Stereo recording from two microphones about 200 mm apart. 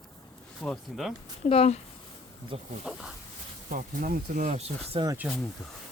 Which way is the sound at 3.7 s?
45° right (ahead or behind).